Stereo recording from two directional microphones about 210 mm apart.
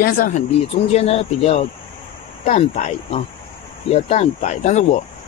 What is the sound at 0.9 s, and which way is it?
Speech, 30° left (ahead or behind).